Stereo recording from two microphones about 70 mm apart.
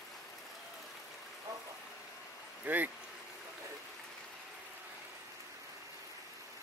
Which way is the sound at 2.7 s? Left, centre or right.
Right.